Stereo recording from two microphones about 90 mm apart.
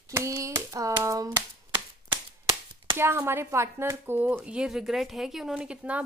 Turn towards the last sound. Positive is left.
turn(degrees=-15)  # may be behind; listen again after turning